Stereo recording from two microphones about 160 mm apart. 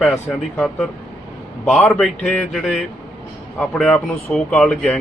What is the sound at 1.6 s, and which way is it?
Speech, 5° left (ahead or behind).